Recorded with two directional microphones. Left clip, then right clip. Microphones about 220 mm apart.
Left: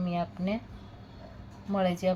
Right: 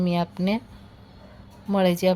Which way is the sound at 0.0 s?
55° right (ahead or behind).